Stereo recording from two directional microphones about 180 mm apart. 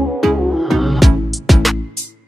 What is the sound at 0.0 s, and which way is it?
Music, centre (ahead or behind).